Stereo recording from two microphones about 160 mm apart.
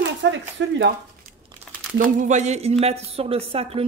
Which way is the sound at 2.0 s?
55° right (ahead or behind).